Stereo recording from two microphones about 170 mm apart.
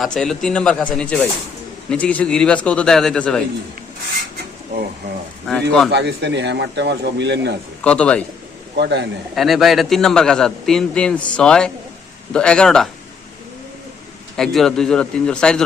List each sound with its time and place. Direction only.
0.0 s a man's voice: centre (ahead or behind)
5.5 s a man's voice: centre (ahead or behind)
5.9 s speech: 85° right
7.9 s speech: 5° left (ahead or behind)
8.7 s a man's voice: 85° right
9.3 s a man's voice: centre (ahead or behind)
14.3 s a man's voice: centre (ahead or behind)